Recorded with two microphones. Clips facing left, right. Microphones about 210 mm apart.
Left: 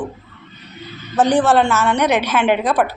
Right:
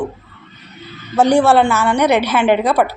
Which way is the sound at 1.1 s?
10° right (ahead or behind).